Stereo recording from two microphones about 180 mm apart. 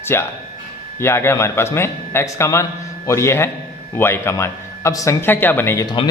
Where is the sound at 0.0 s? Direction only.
15° left (ahead or behind).